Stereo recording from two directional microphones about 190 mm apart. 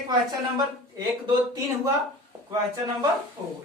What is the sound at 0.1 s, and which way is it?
A woman's voice, 20° right (ahead or behind).